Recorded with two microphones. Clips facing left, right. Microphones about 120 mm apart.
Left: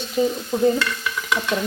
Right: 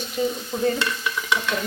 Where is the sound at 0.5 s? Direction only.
15° left (ahead or behind).